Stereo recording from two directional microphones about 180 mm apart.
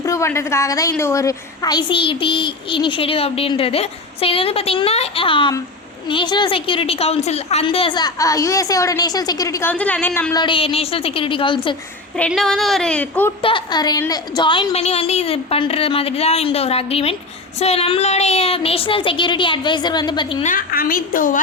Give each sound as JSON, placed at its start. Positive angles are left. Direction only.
{"t": 0.0, "sound": "a woman's voice", "side_deg": 15}
{"t": 10.3, "sound": "a woman's voice", "side_deg": 30}
{"t": 12.1, "sound": "speech", "side_deg": 5}
{"t": 13.4, "sound": "a woman's voice", "side_deg": 25}
{"t": 20.4, "sound": "a woman's voice", "side_deg": 50}